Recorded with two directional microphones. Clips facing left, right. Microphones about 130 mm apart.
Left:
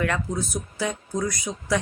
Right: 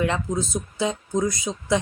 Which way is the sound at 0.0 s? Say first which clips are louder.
Right 2 dB; 20° right (ahead or behind).